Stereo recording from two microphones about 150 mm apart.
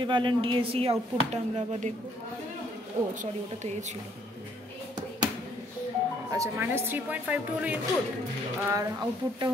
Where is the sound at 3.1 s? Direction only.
55° right (ahead or behind).